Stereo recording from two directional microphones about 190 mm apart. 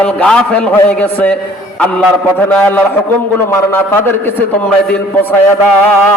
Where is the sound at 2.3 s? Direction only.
10° left (ahead or behind).